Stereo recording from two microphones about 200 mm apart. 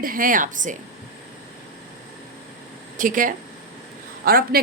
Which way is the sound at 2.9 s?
40° right (ahead or behind).